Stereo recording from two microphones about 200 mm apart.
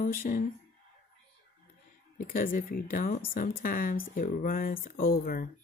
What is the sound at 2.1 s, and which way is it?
Speech, 45° left (ahead or behind).